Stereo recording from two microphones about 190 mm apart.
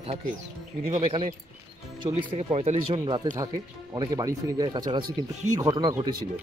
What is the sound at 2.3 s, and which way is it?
Speech, 30° right (ahead or behind).